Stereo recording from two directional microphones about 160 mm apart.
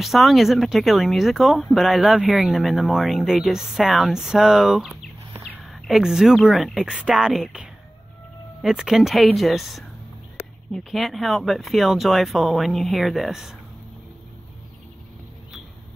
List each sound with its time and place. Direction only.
0.0 s speech: centre (ahead or behind)